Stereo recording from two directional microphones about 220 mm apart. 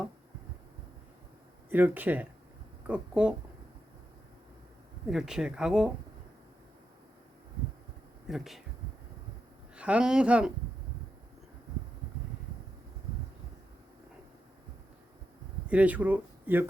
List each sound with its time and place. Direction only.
1.7 s speech: 10° right (ahead or behind)
5.0 s speech: 5° right (ahead or behind)
8.3 s speech: centre (ahead or behind)
9.7 s speech: 5° right (ahead or behind)
15.7 s speech: 5° right (ahead or behind)